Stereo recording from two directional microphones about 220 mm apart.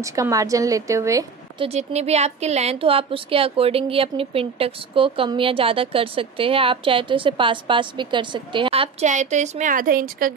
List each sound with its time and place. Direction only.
0.1 s a woman's voice: 15° right (ahead or behind)
1.7 s speech: 30° right (ahead or behind)